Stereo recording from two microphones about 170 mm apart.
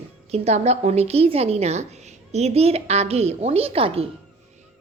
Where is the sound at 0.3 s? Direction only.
40° right (ahead or behind).